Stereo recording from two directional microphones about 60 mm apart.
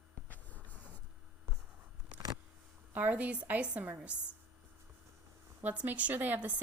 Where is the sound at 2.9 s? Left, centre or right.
Right.